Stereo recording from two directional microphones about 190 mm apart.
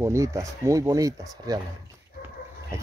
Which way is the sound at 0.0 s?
15° right (ahead or behind).